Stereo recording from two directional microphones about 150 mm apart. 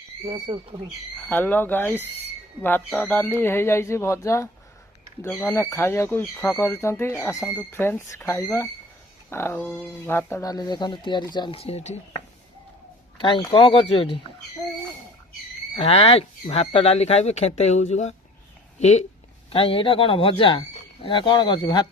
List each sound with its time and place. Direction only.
0.3 s speech: 30° right (ahead or behind)
1.2 s speech: 10° left (ahead or behind); by 12.2 s 45° left (ahead or behind)
13.5 s speech: 35° left (ahead or behind)
15.7 s speech: 45° left (ahead or behind)
19.5 s speech: 40° left (ahead or behind)